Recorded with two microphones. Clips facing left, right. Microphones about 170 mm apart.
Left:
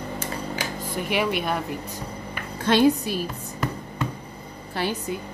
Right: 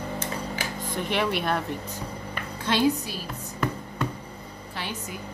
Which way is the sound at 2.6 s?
55° left (ahead or behind).